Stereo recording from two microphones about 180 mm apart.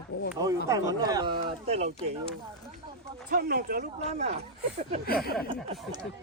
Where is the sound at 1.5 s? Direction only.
35° right (ahead or behind).